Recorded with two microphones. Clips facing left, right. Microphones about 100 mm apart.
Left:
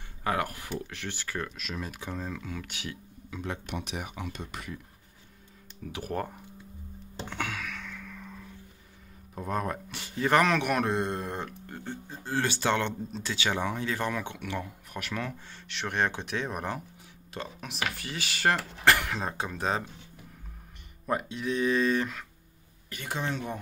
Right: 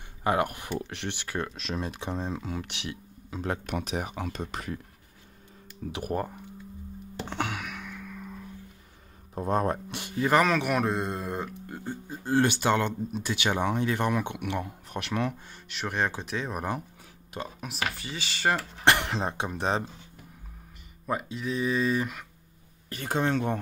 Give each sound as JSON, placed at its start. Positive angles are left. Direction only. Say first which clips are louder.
{"t": 0.2, "sound": "speech", "louder": "right 4 dB", "side_deg": -20}
{"t": 3.3, "sound": "speech", "louder": "right 4 dB", "side_deg": -45}
{"t": 5.9, "sound": "speech", "louder": "right 2 dB", "side_deg": -15}
{"t": 7.2, "sound": "a sound", "louder": "right 3 dB", "side_deg": -25}
{"t": 9.3, "sound": "speech", "louder": "right 5 dB", "side_deg": -30}
{"t": 10.2, "sound": "speech", "louder": "right 1 dB", "side_deg": -5}
{"t": 15.7, "sound": "speech", "louder": "even", "side_deg": -5}
{"t": 17.3, "sound": "speech", "louder": "right 2 dB", "side_deg": -10}
{"t": 17.6, "sound": "speech", "louder": "even", "side_deg": 0}
{"t": 18.9, "sound": "speech", "louder": "right 1 dB", "side_deg": -25}
{"t": 21.1, "sound": "speech", "louder": "left 1 dB", "side_deg": 0}
{"t": 22.8, "sound": "speech", "louder": "right 6 dB", "side_deg": -35}